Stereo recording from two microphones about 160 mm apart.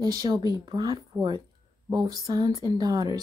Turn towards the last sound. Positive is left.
turn(degrees=-25)  # may be behind; listen again after turning